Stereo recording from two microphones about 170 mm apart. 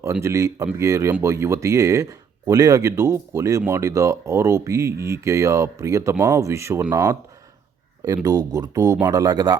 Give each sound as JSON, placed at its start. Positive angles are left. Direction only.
{"t": 0.1, "sound": "speech", "side_deg": -15}